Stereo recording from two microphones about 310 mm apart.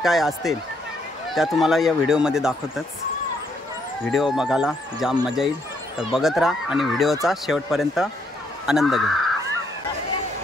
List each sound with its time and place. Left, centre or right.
0.0 s speech: centre
4.1 s speech: centre